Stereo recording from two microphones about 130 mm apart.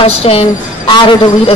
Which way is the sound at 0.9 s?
35° left (ahead or behind).